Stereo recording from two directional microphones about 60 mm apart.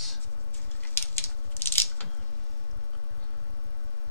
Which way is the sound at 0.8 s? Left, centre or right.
Left.